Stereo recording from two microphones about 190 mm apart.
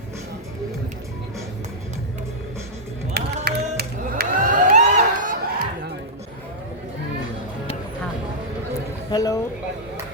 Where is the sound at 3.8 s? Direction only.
50° right (ahead or behind).